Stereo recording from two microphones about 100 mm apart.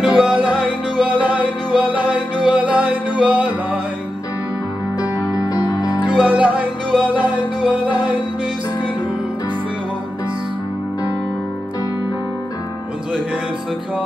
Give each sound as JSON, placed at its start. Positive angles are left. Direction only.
{"t": 0.0, "sound": "music", "side_deg": -10}
{"t": 5.0, "sound": "music", "side_deg": 40}
{"t": 6.1, "sound": "music", "side_deg": -15}